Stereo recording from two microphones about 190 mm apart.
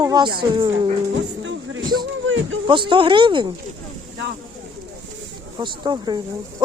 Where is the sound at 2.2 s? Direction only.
90° right.